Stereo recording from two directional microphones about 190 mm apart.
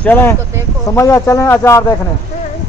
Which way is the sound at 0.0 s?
10° left (ahead or behind).